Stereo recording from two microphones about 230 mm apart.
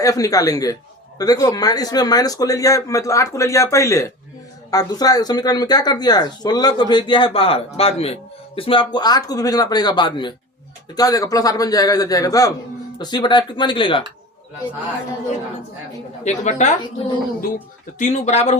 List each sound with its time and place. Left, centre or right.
0.0 s speech: centre
16.2 s speech: left